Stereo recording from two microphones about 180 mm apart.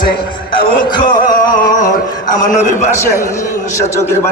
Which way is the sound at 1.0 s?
45° left (ahead or behind).